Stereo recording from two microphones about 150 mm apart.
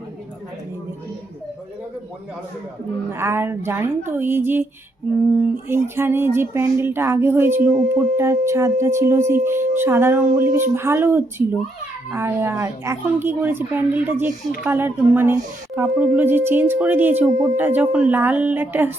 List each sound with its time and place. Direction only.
3.1 s speech: 15° right (ahead or behind)